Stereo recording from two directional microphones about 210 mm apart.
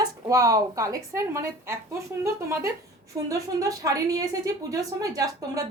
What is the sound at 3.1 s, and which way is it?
A woman's voice, 20° right (ahead or behind).